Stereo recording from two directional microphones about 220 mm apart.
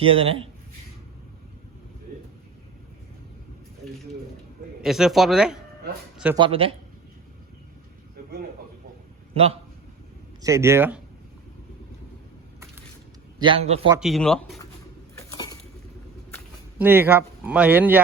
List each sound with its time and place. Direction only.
0.0 s a man's voice: 25° right (ahead or behind)
4.8 s speech: centre (ahead or behind)
6.3 s a man's voice: 25° right (ahead or behind)
9.3 s a man's voice: 25° right (ahead or behind)
10.4 s speech: 15° right (ahead or behind)
13.4 s a man's voice: 25° right (ahead or behind)
14.0 s speech: centre (ahead or behind)
16.7 s speech: 10° right (ahead or behind)